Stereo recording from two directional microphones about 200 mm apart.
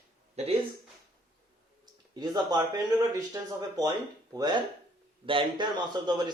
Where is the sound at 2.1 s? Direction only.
20° right (ahead or behind).